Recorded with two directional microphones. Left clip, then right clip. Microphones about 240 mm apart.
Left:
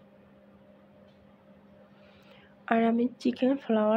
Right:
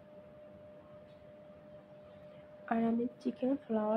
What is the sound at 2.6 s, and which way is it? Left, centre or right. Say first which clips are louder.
Speech: left 8 dB; left.